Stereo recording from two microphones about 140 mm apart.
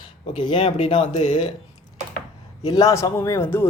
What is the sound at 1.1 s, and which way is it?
Speech, 50° left (ahead or behind).